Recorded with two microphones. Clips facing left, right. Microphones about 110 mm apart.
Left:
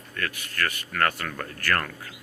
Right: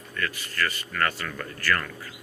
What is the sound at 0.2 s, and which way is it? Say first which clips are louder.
Speech: right 1 dB; 55° left (ahead or behind).